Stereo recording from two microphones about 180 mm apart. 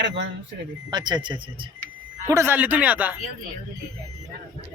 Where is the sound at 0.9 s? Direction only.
25° right (ahead or behind).